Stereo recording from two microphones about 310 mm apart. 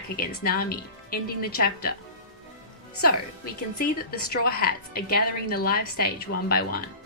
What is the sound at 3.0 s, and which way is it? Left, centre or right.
A woman's voice, left.